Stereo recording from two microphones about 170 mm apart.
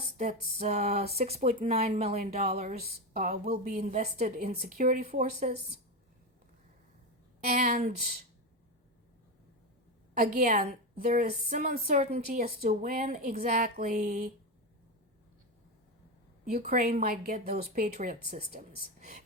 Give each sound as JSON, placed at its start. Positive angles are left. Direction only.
{"t": 0.2, "sound": "speech", "side_deg": -45}
{"t": 2.8, "sound": "a woman's voice", "side_deg": -55}
{"t": 4.6, "sound": "speech", "side_deg": -60}
{"t": 7.6, "sound": "a woman's voice", "side_deg": -50}
{"t": 10.2, "sound": "a woman's voice", "side_deg": -55}
{"t": 16.5, "sound": "a woman's voice", "side_deg": -55}